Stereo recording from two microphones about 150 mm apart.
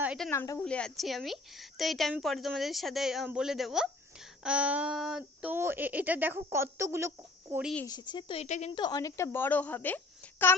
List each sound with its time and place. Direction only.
0.3 s a woman's voice: 20° left (ahead or behind)
0.6 s a woman's voice: 5° left (ahead or behind); by 7.6 s 15° right (ahead or behind)
7.9 s speech: 30° left (ahead or behind)
8.4 s a woman's voice: 50° left (ahead or behind)
8.7 s a woman's voice: 25° left (ahead or behind); by 10.5 s 10° left (ahead or behind)